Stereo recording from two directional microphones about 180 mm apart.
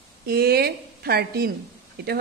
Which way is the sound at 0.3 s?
60° right (ahead or behind).